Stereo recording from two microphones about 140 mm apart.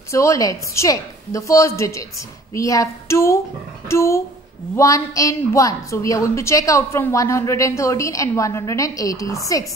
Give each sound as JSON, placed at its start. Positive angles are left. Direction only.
{"t": 0.1, "sound": "a woman's voice", "side_deg": 20}